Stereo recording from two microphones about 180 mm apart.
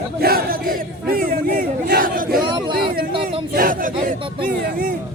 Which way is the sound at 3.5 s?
50° right (ahead or behind).